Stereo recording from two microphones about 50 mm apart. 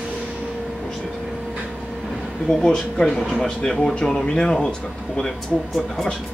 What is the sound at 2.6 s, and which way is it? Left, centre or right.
Speech, centre.